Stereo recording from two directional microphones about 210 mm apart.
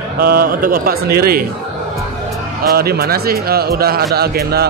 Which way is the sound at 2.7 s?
45° right (ahead or behind).